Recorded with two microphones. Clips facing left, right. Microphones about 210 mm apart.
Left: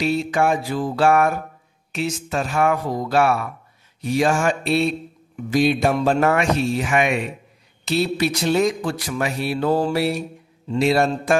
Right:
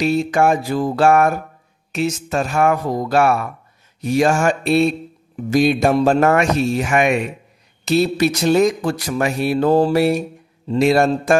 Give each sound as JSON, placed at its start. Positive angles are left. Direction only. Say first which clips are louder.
{"t": 0.0, "sound": "mantra", "louder": "right 4 dB", "side_deg": -45}